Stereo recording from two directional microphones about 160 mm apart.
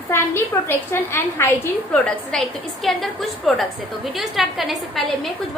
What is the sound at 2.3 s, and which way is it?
A woman's voice, centre (ahead or behind).